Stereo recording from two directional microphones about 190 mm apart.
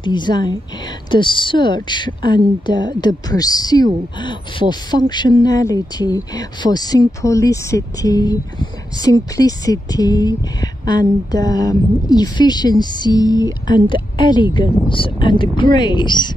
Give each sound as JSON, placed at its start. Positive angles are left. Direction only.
{"t": 0.0, "sound": "a woman's voice", "side_deg": 25}